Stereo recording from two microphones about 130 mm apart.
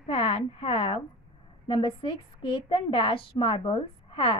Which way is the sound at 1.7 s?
45° left (ahead or behind).